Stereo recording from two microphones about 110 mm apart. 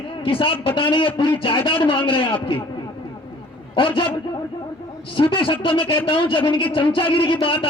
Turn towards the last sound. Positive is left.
turn(degrees=50)  # may be behind; listen again after turning